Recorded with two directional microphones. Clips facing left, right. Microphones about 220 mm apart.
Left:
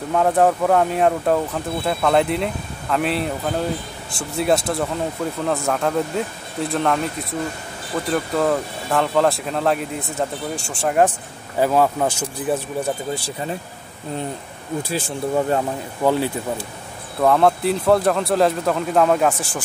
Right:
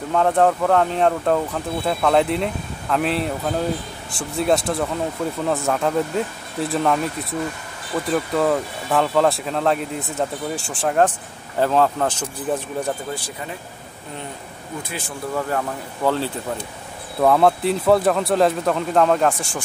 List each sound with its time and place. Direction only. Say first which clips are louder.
0.1 s speech: left 1 dB; 5° left (ahead or behind)
14.8 s speech: left 6 dB; 30° left (ahead or behind); by 16.6 s 15° left (ahead or behind)
17.2 s speech: even; centre (ahead or behind)